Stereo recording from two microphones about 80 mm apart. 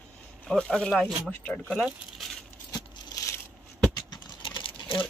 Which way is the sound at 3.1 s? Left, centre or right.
Left.